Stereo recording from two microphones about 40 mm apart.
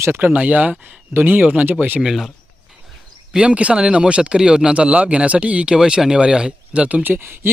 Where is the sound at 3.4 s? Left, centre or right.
Right.